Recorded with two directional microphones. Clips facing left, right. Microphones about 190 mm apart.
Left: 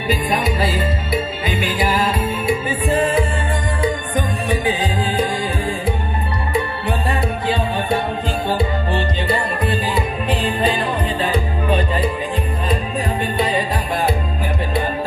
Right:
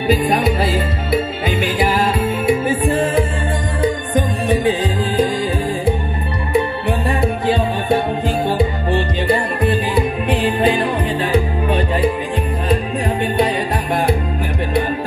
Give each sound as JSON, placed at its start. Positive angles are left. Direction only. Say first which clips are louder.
{"t": 0.1, "sound": "music", "louder": "right 4 dB", "side_deg": -60}
{"t": 4.1, "sound": "music", "louder": "right 4 dB", "side_deg": -60}
{"t": 9.3, "sound": "music", "louder": "right 5 dB", "side_deg": -60}